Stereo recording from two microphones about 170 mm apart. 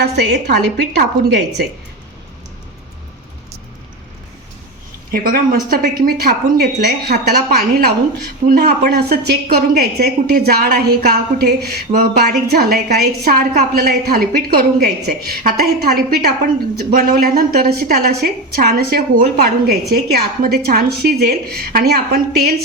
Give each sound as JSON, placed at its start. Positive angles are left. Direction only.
{"t": 0.0, "sound": "a woman's voice", "side_deg": -80}
{"t": 5.1, "sound": "a woman's voice", "side_deg": -60}
{"t": 8.4, "sound": "a woman's voice", "side_deg": -60}